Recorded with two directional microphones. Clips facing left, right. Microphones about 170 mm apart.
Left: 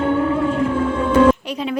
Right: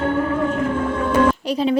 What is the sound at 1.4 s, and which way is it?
Speech, 35° right (ahead or behind).